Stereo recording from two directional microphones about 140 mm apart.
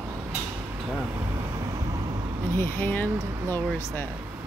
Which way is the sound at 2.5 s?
15° left (ahead or behind).